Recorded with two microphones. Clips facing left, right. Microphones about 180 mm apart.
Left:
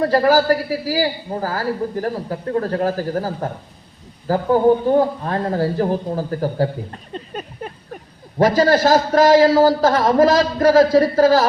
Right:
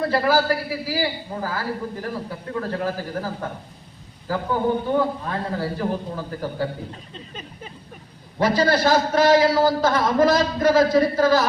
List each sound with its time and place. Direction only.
0.0 s a man's voice: 40° left (ahead or behind); by 7.7 s 55° left (ahead or behind)
8.4 s a man's voice: 45° left (ahead or behind)